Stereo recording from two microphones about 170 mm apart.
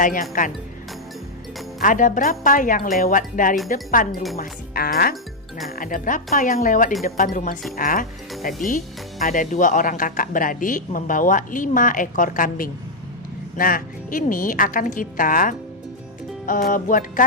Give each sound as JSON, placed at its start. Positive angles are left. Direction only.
{"t": 0.0, "sound": "a woman's voice", "side_deg": 50}
{"t": 1.8, "sound": "a woman's voice", "side_deg": 50}